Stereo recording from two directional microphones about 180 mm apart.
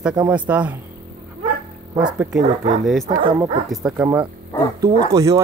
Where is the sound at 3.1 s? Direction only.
50° right (ahead or behind).